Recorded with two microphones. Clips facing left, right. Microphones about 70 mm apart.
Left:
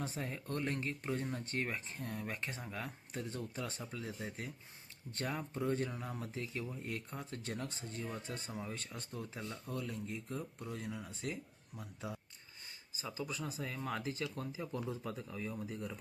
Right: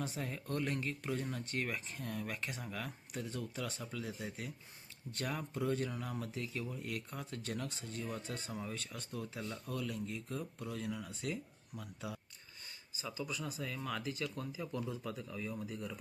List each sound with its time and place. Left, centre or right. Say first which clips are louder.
0.0 s speech: even; left